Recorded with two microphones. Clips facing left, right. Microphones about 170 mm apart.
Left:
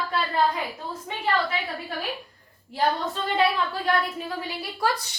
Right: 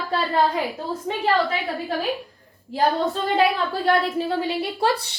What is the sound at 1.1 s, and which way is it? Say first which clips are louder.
Speech: right 4 dB; 40° right (ahead or behind).